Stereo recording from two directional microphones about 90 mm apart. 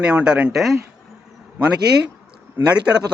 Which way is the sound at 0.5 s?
Centre (ahead or behind).